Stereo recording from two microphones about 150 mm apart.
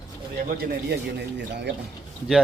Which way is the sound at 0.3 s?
75° right (ahead or behind).